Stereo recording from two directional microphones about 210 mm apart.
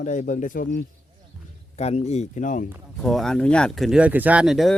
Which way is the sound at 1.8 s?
30° left (ahead or behind).